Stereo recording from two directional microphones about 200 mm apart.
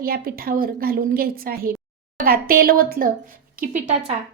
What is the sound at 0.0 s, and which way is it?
A woman's voice, 50° right (ahead or behind).